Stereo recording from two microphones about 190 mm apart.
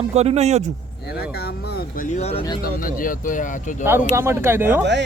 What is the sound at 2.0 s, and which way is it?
Speech, 35° left (ahead or behind).